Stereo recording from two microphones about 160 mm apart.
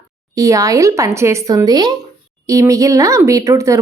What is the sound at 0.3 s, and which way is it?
Speech, 20° right (ahead or behind).